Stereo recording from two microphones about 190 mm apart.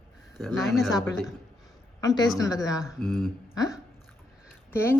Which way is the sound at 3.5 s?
20° left (ahead or behind).